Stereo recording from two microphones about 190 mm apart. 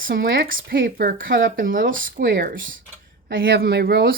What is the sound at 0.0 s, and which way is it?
A woman's voice, 50° right (ahead or behind).